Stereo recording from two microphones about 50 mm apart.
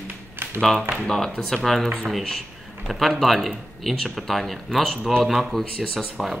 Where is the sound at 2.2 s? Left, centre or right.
Centre.